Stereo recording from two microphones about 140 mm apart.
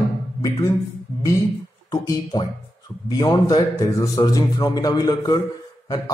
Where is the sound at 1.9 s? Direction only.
30° left (ahead or behind).